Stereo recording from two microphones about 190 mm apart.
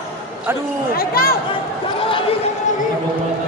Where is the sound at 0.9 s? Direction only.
50° left (ahead or behind).